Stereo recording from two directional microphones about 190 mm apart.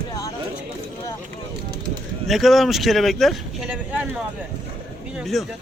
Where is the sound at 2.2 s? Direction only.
Centre (ahead or behind).